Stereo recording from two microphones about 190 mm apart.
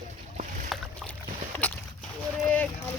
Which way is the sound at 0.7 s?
Centre (ahead or behind).